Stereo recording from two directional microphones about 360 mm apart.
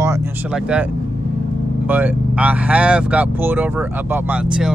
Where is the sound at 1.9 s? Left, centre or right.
Centre.